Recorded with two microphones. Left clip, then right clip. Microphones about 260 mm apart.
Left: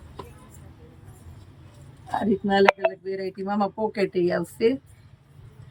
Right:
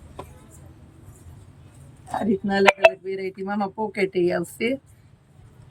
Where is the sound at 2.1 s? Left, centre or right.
Centre.